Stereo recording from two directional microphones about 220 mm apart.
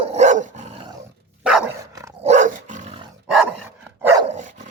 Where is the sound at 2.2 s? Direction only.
35° right (ahead or behind).